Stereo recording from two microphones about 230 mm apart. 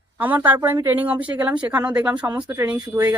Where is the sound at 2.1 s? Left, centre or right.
Centre.